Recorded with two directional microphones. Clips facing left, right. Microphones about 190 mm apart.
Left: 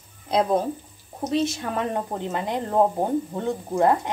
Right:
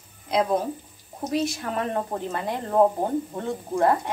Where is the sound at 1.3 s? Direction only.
25° left (ahead or behind).